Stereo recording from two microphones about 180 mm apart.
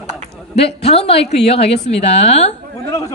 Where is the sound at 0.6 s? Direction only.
35° left (ahead or behind).